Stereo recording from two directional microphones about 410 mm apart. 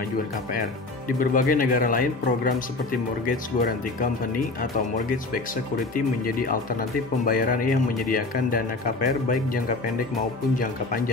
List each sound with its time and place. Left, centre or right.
1.0 s speech: centre